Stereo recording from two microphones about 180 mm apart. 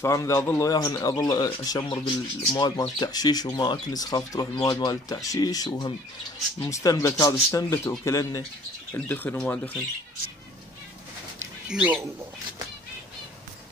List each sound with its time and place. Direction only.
0.0 s speech: 15° left (ahead or behind)
11.6 s speech: 5° right (ahead or behind)